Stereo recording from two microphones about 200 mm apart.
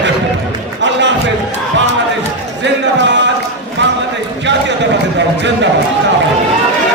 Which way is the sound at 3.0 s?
60° right (ahead or behind).